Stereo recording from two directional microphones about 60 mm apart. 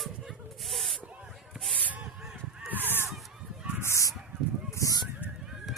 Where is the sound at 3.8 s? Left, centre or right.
Left.